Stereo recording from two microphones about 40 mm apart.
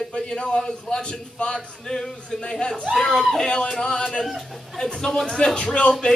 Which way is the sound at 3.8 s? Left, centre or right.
Centre.